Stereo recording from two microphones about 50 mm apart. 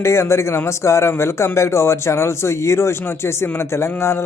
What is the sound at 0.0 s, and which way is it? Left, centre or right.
A man's voice, left.